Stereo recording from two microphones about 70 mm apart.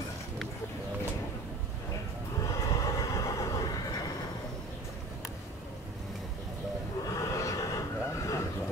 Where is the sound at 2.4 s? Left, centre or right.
Left.